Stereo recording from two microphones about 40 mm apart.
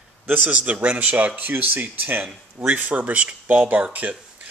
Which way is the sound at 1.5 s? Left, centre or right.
Right.